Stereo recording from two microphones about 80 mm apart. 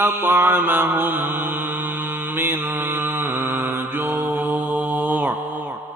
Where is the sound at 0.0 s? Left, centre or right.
Right.